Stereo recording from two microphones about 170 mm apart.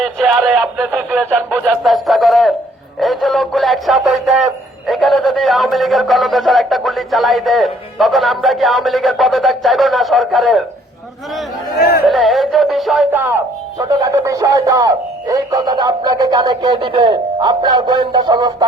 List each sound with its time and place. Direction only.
0.0 s speech: centre (ahead or behind)
11.7 s speech: 65° left (ahead or behind)
12.0 s speech: centre (ahead or behind)
13.1 s speech: 10° right (ahead or behind)